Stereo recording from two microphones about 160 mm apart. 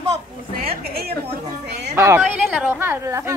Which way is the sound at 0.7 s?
75° right (ahead or behind).